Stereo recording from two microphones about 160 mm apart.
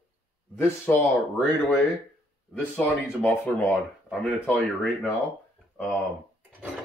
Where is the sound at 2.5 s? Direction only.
10° left (ahead or behind).